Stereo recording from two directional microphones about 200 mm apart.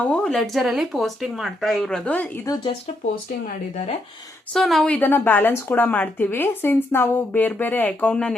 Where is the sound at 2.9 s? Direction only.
35° left (ahead or behind).